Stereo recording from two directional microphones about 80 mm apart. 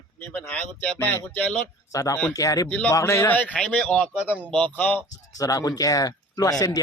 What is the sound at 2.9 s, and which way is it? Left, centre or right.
Speech, left.